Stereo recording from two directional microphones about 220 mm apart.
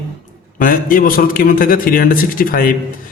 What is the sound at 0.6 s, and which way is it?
A man's voice, 40° left (ahead or behind).